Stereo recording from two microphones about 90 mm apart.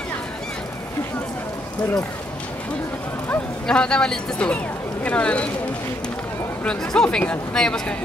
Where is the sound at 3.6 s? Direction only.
10° left (ahead or behind).